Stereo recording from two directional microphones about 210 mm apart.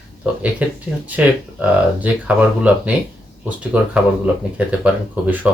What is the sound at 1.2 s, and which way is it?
Speech, 5° right (ahead or behind).